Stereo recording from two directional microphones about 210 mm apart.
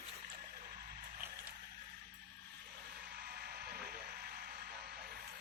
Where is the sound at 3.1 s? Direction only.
50° right (ahead or behind).